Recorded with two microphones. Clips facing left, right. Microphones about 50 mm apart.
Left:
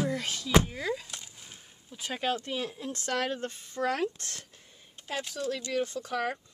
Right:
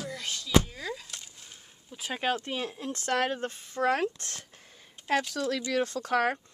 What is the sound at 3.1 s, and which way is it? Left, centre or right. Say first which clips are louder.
Speech: right 3 dB; centre.